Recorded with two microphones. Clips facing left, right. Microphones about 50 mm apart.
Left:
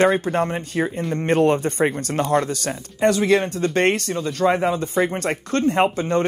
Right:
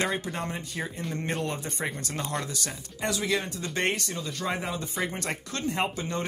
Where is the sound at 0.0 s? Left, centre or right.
Left.